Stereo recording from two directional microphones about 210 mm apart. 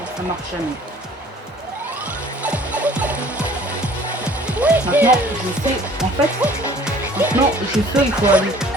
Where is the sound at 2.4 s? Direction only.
5° right (ahead or behind).